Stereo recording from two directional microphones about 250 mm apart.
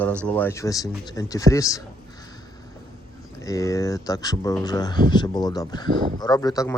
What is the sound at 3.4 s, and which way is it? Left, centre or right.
Speech, centre.